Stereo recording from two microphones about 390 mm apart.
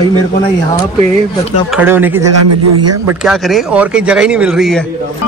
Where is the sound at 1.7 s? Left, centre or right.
Centre.